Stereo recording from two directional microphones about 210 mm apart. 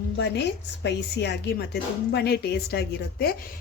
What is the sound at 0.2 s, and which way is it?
A woman's voice, 55° left (ahead or behind).